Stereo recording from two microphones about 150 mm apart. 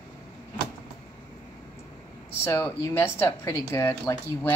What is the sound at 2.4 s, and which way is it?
Speech, 15° left (ahead or behind).